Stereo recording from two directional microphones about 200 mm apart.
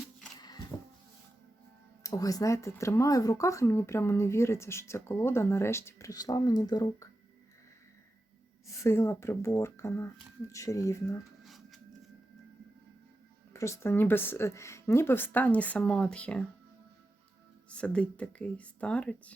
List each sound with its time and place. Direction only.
0.3 s a sound: 20° left (ahead or behind)
2.0 s speech: 15° left (ahead or behind)
8.6 s speech: 15° left (ahead or behind)
11.4 s a sound: centre (ahead or behind)
13.5 s speech: 15° left (ahead or behind)
17.7 s speech: 5° left (ahead or behind)